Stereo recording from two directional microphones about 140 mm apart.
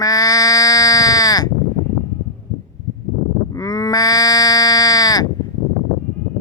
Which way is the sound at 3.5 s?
25° left (ahead or behind).